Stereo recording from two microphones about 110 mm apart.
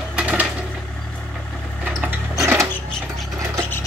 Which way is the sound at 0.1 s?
10° right (ahead or behind).